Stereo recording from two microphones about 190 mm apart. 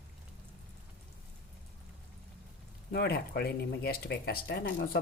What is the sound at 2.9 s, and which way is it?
Speech, 55° left (ahead or behind).